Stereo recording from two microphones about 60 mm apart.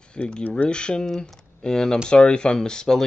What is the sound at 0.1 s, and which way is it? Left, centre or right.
Speech, centre.